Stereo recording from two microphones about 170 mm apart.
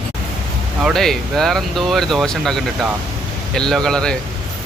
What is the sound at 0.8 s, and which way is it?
Speech, centre (ahead or behind).